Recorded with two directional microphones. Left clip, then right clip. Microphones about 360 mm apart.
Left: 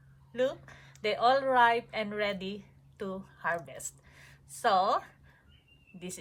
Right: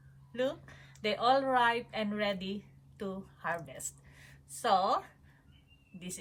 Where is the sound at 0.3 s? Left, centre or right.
Centre.